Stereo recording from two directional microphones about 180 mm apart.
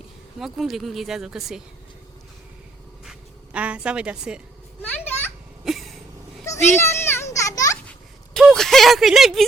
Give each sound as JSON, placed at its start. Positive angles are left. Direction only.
{"t": 0.3, "sound": "speech", "side_deg": 0}
{"t": 3.0, "sound": "a sound", "side_deg": -5}
{"t": 4.8, "sound": "children playing", "side_deg": 10}
{"t": 5.6, "sound": "cough", "side_deg": 0}
{"t": 6.7, "sound": "children playing", "side_deg": 15}
{"t": 7.9, "sound": "a sound", "side_deg": 5}